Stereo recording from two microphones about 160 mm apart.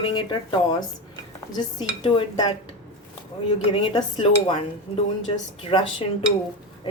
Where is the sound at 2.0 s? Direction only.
30° left (ahead or behind).